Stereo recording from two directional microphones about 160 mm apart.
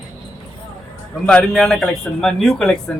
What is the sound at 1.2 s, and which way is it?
Speech, 5° left (ahead or behind).